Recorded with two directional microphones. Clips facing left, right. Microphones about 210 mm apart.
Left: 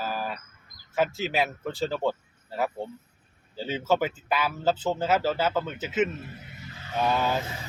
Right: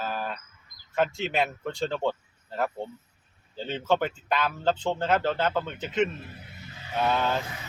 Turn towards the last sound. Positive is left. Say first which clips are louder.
# even
turn(degrees=5)  # may be behind; listen again after turning